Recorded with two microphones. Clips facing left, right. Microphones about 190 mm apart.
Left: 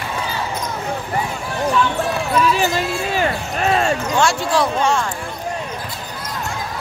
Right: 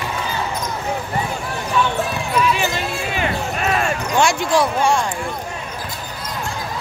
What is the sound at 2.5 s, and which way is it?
Basketball bounce, 35° left (ahead or behind).